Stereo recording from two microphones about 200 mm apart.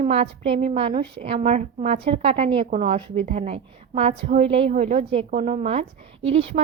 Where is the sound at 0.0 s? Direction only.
30° right (ahead or behind).